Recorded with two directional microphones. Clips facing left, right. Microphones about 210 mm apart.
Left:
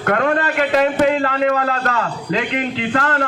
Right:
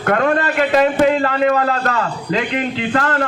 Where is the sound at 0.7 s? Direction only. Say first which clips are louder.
Right 2 dB; 40° right (ahead or behind).